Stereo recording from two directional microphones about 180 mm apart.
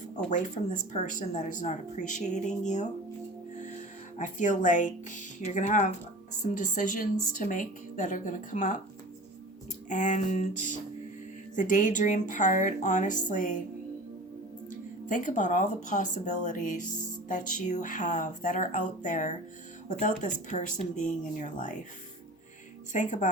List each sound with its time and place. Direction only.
0.3 s speech: 45° left (ahead or behind)
4.2 s speech: 45° left (ahead or behind)
9.9 s speech: 45° left (ahead or behind)
14.7 s speech: 45° left (ahead or behind)
22.9 s speech: 45° left (ahead or behind)